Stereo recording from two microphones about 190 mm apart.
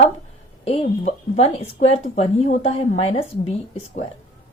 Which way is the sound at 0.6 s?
35° left (ahead or behind).